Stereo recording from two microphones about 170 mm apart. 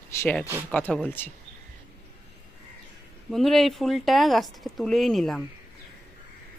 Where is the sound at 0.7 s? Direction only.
10° left (ahead or behind).